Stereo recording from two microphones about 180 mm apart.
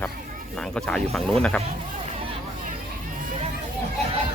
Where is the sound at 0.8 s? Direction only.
5° left (ahead or behind).